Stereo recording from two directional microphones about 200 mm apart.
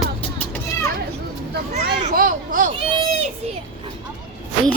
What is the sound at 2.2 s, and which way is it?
Speech, 40° right (ahead or behind).